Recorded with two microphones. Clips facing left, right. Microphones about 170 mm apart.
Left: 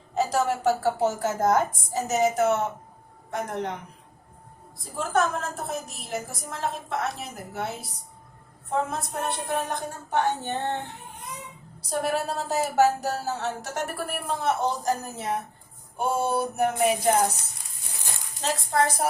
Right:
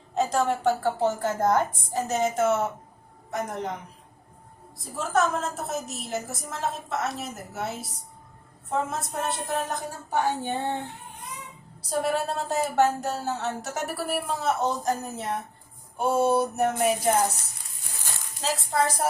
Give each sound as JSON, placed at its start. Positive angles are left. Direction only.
{"t": 0.1, "sound": "speech", "side_deg": 0}
{"t": 4.9, "sound": "speech", "side_deg": 0}
{"t": 11.9, "sound": "speech", "side_deg": 0}
{"t": 18.4, "sound": "speech", "side_deg": 0}